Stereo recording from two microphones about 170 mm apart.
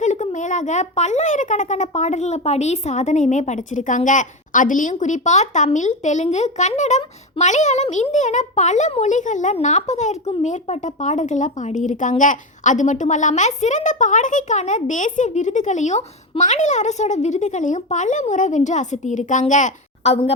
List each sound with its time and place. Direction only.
0.0 s speech: 45° left (ahead or behind)